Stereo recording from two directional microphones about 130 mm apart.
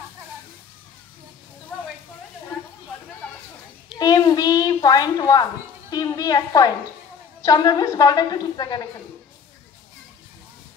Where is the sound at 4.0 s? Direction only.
30° left (ahead or behind).